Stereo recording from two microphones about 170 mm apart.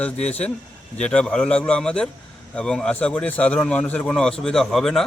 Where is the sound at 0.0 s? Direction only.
10° left (ahead or behind).